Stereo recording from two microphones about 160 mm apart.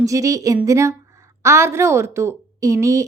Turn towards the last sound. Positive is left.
turn(degrees=-20)  # may be behind; listen again after turning